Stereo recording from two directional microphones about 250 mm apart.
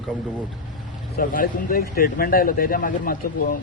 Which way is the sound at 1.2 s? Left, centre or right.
Left.